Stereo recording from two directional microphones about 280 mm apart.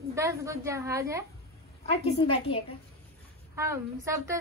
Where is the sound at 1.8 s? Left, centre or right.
Left.